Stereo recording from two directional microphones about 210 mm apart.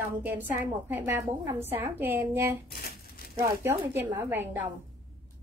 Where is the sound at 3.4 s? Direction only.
10° right (ahead or behind).